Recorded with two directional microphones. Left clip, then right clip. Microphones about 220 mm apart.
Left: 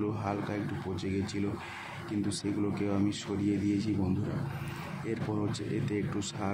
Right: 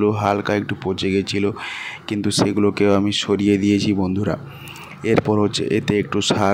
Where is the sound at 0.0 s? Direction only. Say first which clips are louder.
Right 16 dB; 40° right (ahead or behind).